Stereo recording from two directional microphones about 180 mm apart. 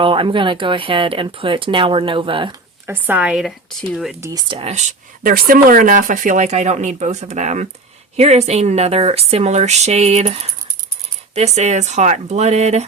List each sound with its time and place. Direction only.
0.0 s speech: 30° right (ahead or behind)
2.8 s speech: 10° right (ahead or behind)
4.2 s speech: 20° right (ahead or behind); by 12.8 s 40° right (ahead or behind)